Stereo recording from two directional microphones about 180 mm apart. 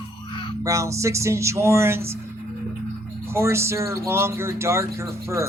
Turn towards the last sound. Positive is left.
turn(degrees=-15)  # may be behind; listen again after turning